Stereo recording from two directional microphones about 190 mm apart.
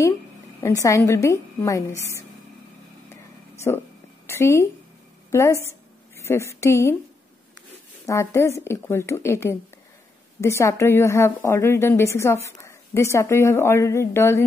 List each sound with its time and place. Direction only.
0.6 s a woman's voice: 15° left (ahead or behind)
3.5 s a woman's voice: 15° left (ahead or behind)
8.1 s a woman's voice: 15° left (ahead or behind)